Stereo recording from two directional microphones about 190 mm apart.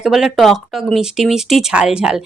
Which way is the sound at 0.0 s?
Centre (ahead or behind).